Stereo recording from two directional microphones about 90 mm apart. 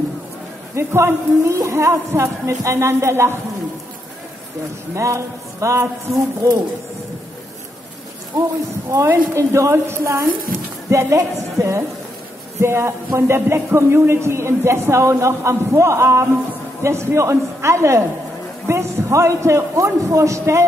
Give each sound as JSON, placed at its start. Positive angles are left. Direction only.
{"t": 0.7, "sound": "speech", "side_deg": -30}
{"t": 4.9, "sound": "speech", "side_deg": -35}
{"t": 8.3, "sound": "speech", "side_deg": -45}